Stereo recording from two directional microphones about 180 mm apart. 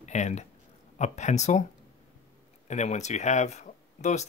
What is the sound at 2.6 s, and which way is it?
Speech, 40° left (ahead or behind).